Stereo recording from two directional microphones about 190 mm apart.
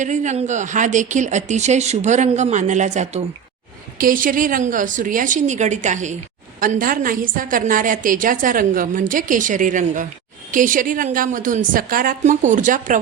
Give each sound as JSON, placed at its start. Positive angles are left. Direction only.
{"t": 0.0, "sound": "speech", "side_deg": -40}
{"t": 3.9, "sound": "a woman's voice", "side_deg": -45}